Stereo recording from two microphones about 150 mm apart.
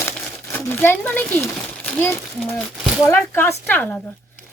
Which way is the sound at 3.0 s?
15° left (ahead or behind).